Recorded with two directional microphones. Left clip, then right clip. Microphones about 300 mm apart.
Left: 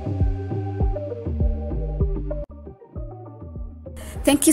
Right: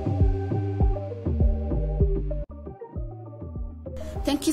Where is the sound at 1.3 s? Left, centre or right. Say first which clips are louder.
Right 1 dB; centre.